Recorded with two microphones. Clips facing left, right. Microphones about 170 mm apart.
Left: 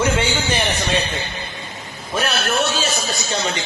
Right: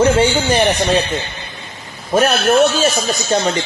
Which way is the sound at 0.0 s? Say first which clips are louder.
Right 7 dB; 40° right (ahead or behind).